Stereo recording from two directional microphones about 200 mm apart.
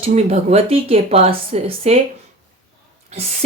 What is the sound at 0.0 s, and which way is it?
A woman's voice, 30° right (ahead or behind).